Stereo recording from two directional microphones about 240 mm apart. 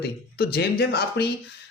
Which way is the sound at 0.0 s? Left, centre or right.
Left.